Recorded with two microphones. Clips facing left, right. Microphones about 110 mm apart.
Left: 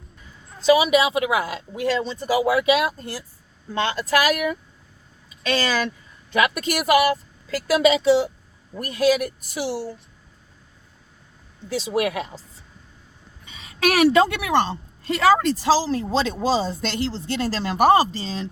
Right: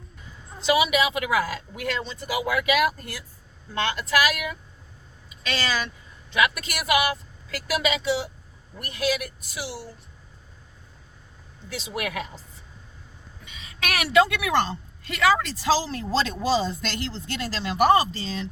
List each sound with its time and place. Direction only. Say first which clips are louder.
0.6 s a woman's voice: left 5 dB; 35° left (ahead or behind)
6.3 s a woman's voice: left 3 dB; 40° left (ahead or behind)
11.7 s a woman's voice: left 8 dB; 35° left (ahead or behind)
13.7 s a woman's voice: left 5 dB; 35° left (ahead or behind)